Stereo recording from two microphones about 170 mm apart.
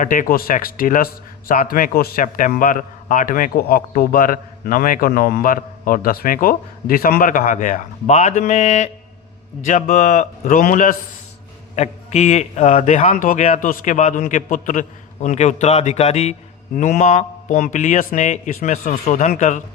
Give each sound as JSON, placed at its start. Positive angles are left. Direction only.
{"t": 0.0, "sound": "a man's voice", "side_deg": 50}
{"t": 11.8, "sound": "a man's voice", "side_deg": 40}